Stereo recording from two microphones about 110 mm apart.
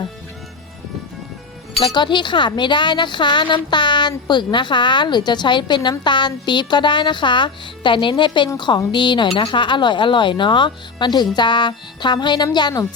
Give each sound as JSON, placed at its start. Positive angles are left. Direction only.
{"t": 1.9, "sound": "a woman's voice", "side_deg": 45}